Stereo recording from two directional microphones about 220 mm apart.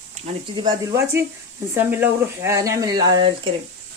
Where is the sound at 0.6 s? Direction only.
15° right (ahead or behind).